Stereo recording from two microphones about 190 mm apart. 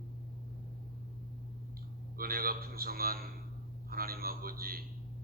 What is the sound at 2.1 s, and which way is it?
A man's voice, 50° right (ahead or behind).